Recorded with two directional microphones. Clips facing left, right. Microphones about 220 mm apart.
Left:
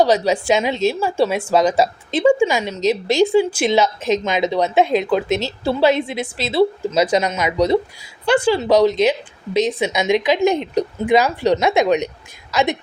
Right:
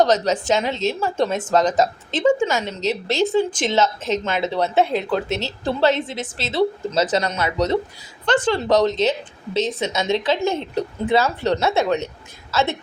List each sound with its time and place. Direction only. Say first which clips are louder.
0.0 s a woman's voice: left 2 dB; 10° left (ahead or behind)